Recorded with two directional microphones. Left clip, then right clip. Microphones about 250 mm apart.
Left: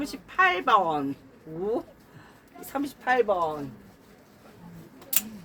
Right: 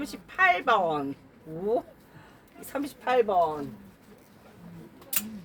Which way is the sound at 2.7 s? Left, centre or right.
Centre.